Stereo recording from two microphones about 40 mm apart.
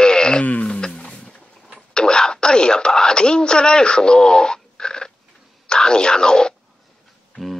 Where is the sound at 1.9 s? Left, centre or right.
Centre.